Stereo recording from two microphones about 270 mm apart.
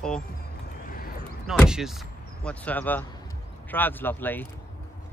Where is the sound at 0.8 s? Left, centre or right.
Left.